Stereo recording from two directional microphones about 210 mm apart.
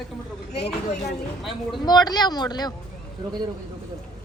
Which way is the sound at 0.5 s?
50° left (ahead or behind).